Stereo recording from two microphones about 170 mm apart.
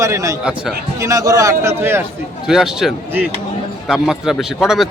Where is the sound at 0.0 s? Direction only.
20° right (ahead or behind).